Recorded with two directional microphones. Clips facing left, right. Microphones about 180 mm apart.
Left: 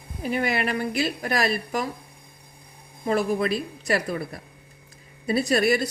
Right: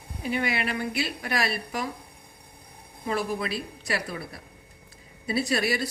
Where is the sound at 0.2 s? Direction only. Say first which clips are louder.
Left 3 dB; 45° left (ahead or behind).